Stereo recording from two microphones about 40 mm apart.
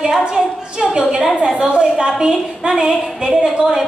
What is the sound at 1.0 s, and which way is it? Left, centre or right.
Speech, centre.